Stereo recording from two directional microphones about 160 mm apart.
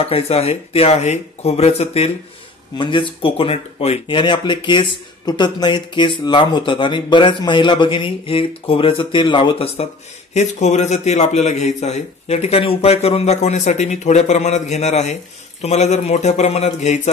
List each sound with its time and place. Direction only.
0.0 s speech: 40° left (ahead or behind)
4.2 s a man's voice: 30° left (ahead or behind)